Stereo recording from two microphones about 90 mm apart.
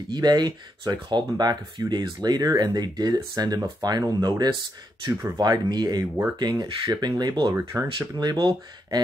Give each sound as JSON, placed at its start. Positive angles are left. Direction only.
{"t": 0.1, "sound": "speech", "side_deg": -50}
{"t": 5.1, "sound": "speech", "side_deg": -25}
{"t": 5.4, "sound": "speech", "side_deg": -50}
{"t": 7.5, "sound": "speech", "side_deg": -30}
{"t": 8.2, "sound": "speech", "side_deg": -50}